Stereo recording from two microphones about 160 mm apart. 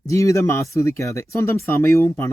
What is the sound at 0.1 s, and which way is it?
Speech, 20° left (ahead or behind).